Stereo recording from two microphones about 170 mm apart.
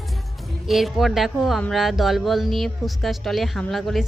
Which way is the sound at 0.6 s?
Centre (ahead or behind).